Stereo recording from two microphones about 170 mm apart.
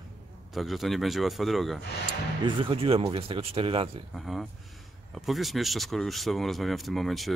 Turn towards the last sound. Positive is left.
turn(degrees=0)  # may be behind; listen again after turning